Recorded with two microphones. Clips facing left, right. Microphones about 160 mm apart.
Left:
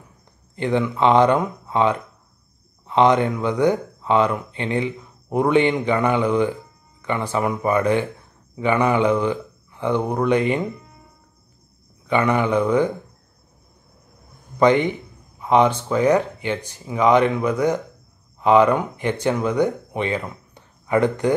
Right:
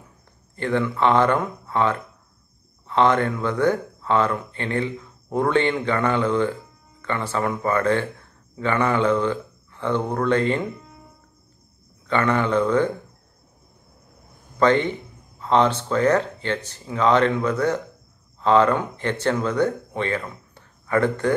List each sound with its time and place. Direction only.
0.6 s speech: 15° left (ahead or behind)
12.1 s speech: 15° left (ahead or behind)
14.6 s speech: 15° left (ahead or behind)